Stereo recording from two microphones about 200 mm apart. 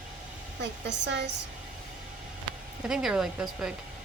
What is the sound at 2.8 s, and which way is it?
Speech, centre (ahead or behind).